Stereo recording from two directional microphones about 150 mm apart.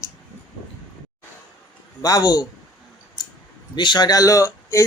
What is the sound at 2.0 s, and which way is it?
Speech, 25° left (ahead or behind).